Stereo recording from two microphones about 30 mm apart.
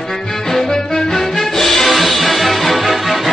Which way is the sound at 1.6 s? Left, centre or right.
Centre.